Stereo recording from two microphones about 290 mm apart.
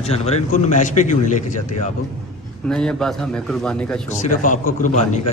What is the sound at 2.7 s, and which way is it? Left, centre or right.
A man's voice, centre.